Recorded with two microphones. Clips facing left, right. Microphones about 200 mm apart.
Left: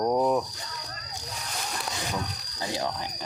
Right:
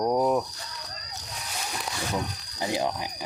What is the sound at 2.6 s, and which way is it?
Speech, 20° right (ahead or behind).